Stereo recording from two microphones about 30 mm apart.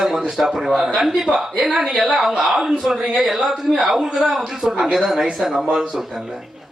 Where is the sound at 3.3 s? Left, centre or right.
Centre.